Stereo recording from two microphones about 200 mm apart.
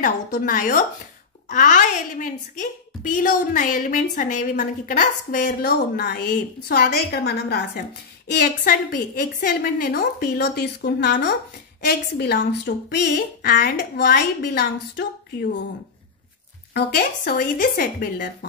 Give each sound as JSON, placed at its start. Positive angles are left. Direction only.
{"t": 0.0, "sound": "a woman's voice", "side_deg": 40}
{"t": 5.4, "sound": "a woman's voice", "side_deg": 55}
{"t": 16.7, "sound": "a woman's voice", "side_deg": 50}